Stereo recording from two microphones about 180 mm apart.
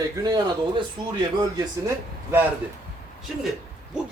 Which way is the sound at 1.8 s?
10° right (ahead or behind).